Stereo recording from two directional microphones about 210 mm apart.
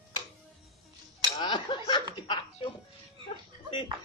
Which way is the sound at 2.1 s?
20° left (ahead or behind).